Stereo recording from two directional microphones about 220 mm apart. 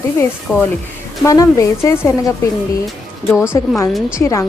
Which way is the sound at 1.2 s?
15° left (ahead or behind).